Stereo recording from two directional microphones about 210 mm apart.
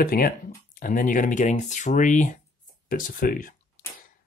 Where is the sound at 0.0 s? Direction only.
45° left (ahead or behind).